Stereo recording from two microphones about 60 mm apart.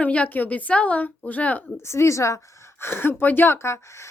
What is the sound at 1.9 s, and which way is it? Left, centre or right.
Speech, left.